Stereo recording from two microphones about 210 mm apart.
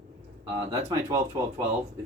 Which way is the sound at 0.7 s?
20° right (ahead or behind).